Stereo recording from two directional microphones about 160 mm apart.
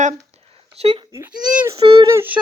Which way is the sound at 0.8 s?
40° right (ahead or behind).